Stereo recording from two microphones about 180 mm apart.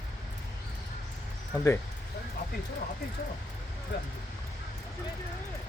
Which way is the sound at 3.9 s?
75° left (ahead or behind).